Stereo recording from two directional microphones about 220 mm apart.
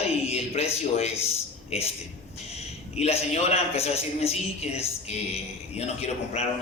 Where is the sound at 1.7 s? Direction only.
30° left (ahead or behind).